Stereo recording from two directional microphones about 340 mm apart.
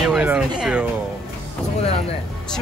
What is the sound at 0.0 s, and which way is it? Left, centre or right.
Music, centre.